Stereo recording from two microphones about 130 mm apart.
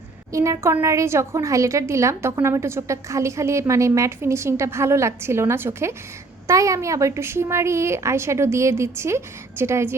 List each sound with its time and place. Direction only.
0.3 s a woman's voice: 25° right (ahead or behind)